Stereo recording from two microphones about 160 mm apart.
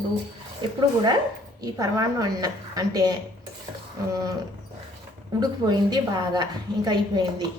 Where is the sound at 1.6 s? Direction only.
25° right (ahead or behind).